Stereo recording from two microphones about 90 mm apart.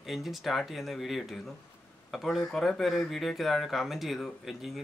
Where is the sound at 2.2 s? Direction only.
5° left (ahead or behind).